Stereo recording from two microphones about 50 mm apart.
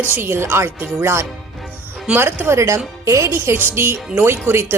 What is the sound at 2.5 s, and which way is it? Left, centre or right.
Speech, right.